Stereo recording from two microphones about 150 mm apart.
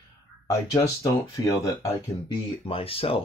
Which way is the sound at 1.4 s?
20° left (ahead or behind).